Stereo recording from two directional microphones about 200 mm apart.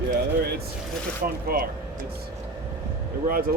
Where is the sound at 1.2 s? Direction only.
45° right (ahead or behind).